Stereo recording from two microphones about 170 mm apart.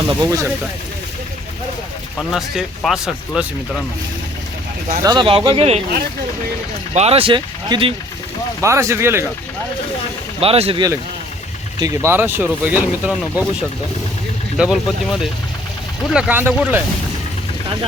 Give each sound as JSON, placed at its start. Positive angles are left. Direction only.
{"t": 0.1, "sound": "speech", "side_deg": -20}
{"t": 2.3, "sound": "speech", "side_deg": 0}
{"t": 5.0, "sound": "speech", "side_deg": -30}
{"t": 6.9, "sound": "speech", "side_deg": -35}
{"t": 8.6, "sound": "speech", "side_deg": -15}
{"t": 10.4, "sound": "speech", "side_deg": -35}
{"t": 11.8, "sound": "speech", "side_deg": -15}
{"t": 14.6, "sound": "speech", "side_deg": -5}